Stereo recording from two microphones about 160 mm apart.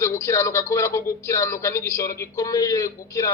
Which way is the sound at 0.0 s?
20° left (ahead or behind).